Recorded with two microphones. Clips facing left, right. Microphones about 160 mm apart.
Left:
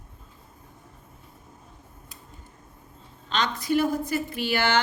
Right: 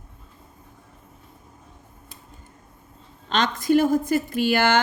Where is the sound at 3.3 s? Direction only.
45° right (ahead or behind).